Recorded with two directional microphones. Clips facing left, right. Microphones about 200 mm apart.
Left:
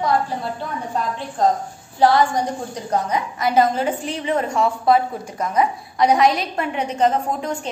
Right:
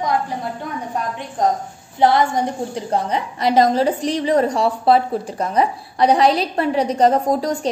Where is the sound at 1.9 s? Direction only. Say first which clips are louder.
Even; 20° right (ahead or behind).